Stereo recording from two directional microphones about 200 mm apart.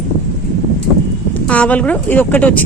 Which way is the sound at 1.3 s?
5° left (ahead or behind).